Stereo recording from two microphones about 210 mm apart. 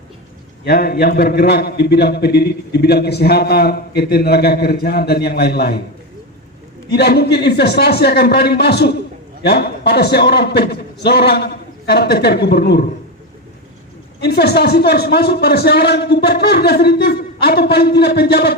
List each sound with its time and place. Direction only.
0.6 s a man's voice: 45° left (ahead or behind)
6.9 s a man's voice: 50° left (ahead or behind)
14.2 s a man's voice: 50° left (ahead or behind)